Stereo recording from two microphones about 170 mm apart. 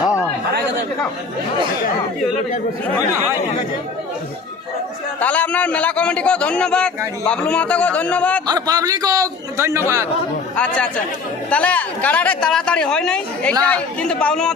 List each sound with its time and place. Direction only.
0.0 s a sound: 15° left (ahead or behind)
5.2 s a man's voice: 10° left (ahead or behind)
8.4 s a man's voice: 20° right (ahead or behind)
10.5 s a man's voice: 5° left (ahead or behind)